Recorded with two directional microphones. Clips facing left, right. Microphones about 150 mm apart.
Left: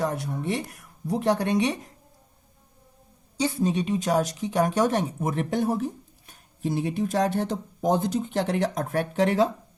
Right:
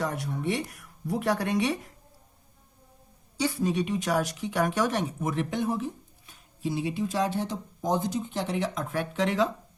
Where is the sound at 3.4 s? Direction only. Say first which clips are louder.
Left 2 dB; 25° left (ahead or behind).